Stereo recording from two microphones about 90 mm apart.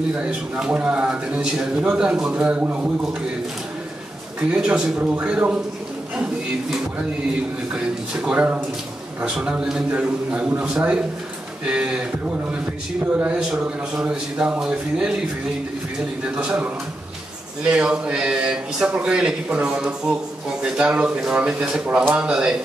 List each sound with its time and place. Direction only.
0.2 s speech: 10° right (ahead or behind)
4.5 s speech: 10° right (ahead or behind)
7.7 s speech: 15° right (ahead or behind)
13.1 s speech: 20° right (ahead or behind)
16.3 s speech: 15° right (ahead or behind)